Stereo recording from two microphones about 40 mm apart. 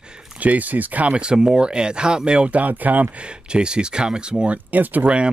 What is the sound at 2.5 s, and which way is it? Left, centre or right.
Speech, right.